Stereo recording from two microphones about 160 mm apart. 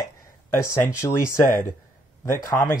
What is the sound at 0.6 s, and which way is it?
Speech, 20° left (ahead or behind).